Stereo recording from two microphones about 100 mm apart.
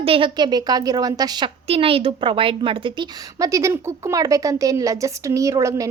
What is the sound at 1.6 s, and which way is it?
A woman's voice, 75° right (ahead or behind).